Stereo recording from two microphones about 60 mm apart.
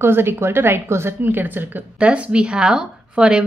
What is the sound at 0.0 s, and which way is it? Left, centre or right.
Speech, right.